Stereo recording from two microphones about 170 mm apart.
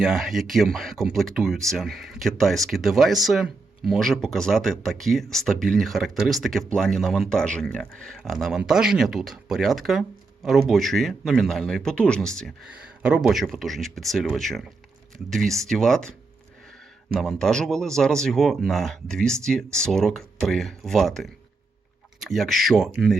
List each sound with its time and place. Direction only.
0.0 s speech: 5° right (ahead or behind)
17.2 s speech: 5° left (ahead or behind)